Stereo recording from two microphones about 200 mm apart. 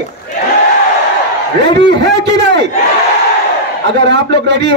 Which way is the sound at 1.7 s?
60° right (ahead or behind).